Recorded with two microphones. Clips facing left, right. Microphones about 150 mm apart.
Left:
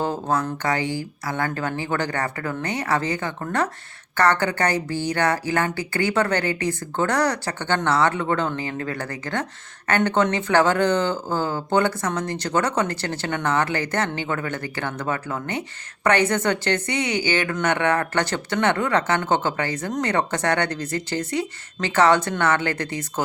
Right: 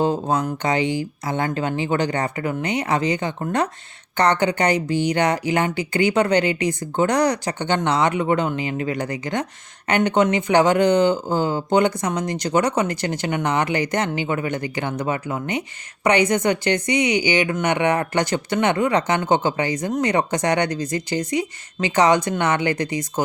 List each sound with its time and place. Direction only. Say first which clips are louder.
0.0 s speech: right 3 dB; 20° right (ahead or behind)